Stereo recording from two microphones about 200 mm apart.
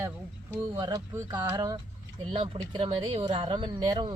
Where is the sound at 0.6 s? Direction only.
15° right (ahead or behind).